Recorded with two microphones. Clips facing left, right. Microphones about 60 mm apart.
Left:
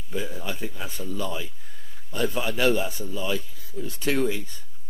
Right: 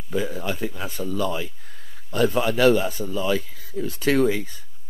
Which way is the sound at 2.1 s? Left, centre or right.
Right.